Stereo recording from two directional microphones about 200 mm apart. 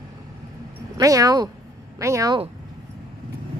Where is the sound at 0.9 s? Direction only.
15° right (ahead or behind).